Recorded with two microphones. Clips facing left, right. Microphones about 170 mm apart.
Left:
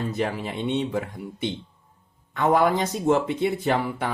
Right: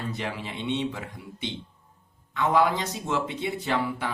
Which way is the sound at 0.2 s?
45° left (ahead or behind).